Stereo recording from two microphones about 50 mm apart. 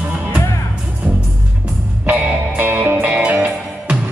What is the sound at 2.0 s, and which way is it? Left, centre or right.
Music, right.